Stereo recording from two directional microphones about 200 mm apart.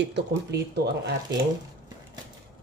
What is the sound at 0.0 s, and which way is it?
Speech, 55° right (ahead or behind).